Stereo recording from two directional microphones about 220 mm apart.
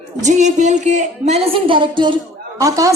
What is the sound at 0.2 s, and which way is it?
A woman's voice, 30° right (ahead or behind).